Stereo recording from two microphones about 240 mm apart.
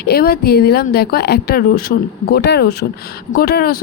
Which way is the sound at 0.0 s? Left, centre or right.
Left.